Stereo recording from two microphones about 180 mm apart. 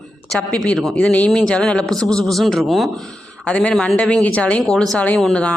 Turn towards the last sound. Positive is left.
turn(degrees=5)  # may be behind; listen again after turning